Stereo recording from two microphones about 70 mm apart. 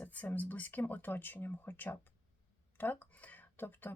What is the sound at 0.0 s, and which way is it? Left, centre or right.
Speech, left.